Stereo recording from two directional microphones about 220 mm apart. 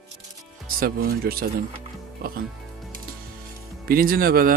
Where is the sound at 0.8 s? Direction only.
40° right (ahead or behind).